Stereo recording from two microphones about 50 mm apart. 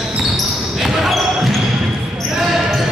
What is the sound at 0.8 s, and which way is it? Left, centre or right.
Basketball bounce, centre.